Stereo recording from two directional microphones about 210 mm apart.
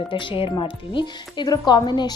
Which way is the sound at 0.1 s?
25° left (ahead or behind).